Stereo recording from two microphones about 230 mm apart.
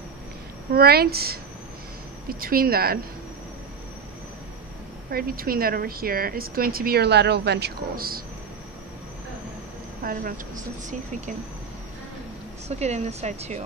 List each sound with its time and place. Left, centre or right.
0.7 s a woman's voice: right
5.1 s a woman's voice: right
10.0 s a woman's voice: right
12.6 s speech: right